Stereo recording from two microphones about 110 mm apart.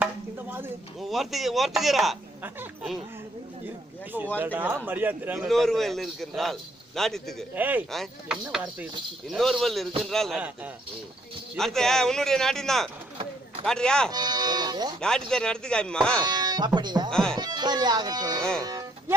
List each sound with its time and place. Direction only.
0.9 s a man's voice: centre (ahead or behind)
4.4 s a man's voice: 15° right (ahead or behind)
5.5 s a man's voice: centre (ahead or behind)
7.5 s a man's voice: 15° right (ahead or behind)
7.9 s a man's voice: centre (ahead or behind)
11.5 s a man's voice: 5° left (ahead or behind)
14.1 s speech: 35° right (ahead or behind)
15.0 s speech: 5° left (ahead or behind)
16.2 s speech: 35° right (ahead or behind)
17.1 s speech: 5° left (ahead or behind)
17.3 s speech: 40° right (ahead or behind)
18.6 s music: 35° right (ahead or behind)